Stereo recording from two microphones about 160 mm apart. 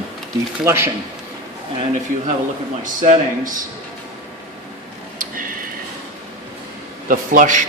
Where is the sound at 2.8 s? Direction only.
55° right (ahead or behind).